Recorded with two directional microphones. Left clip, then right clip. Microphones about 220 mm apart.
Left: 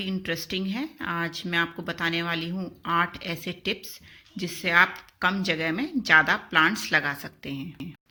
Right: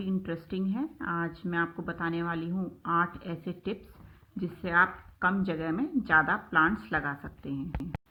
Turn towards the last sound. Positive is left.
turn(degrees=25)  # may be behind; listen again after turning